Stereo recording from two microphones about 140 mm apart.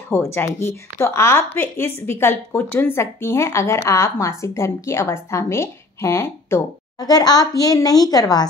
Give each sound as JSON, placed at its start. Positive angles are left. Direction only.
{"t": 0.1, "sound": "a woman's voice", "side_deg": 15}
{"t": 7.0, "sound": "a woman's voice", "side_deg": 30}